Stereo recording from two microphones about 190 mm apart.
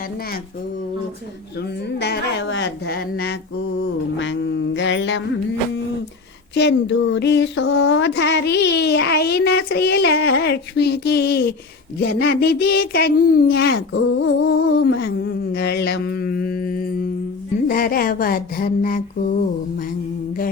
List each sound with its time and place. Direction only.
1.5 s speech: 60° left (ahead or behind)
3.8 s mantra: 75° left (ahead or behind)
6.5 s speech: 65° left (ahead or behind); by 17.1 s 50° left (ahead or behind)
17.7 s mantra: 50° left (ahead or behind)